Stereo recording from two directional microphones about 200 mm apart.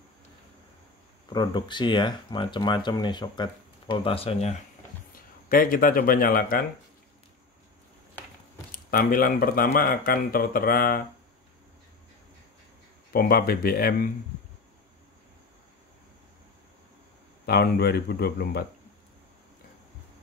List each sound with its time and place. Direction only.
1.3 s speech: 20° left (ahead or behind)
5.5 s speech: 45° left (ahead or behind)
8.7 s speech: 45° left (ahead or behind)
13.1 s speech: 50° left (ahead or behind)
17.5 s speech: 55° left (ahead or behind)